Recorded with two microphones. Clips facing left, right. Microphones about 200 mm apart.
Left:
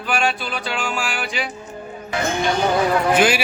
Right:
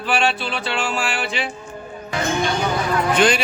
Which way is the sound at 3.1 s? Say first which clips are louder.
Right 2 dB; 5° left (ahead or behind).